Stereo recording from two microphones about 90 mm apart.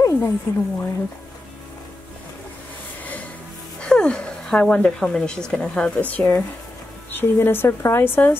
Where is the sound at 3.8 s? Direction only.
10° left (ahead or behind).